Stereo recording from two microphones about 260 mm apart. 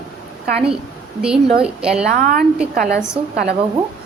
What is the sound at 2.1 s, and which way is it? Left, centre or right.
A woman's voice, right.